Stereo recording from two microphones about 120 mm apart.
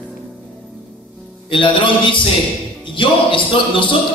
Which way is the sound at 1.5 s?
45° left (ahead or behind).